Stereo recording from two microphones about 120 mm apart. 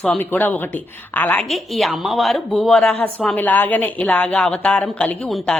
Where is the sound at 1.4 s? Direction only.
Centre (ahead or behind).